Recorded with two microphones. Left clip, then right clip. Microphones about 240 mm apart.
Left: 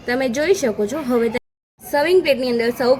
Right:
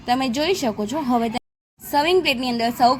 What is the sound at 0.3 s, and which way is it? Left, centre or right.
Speech, centre.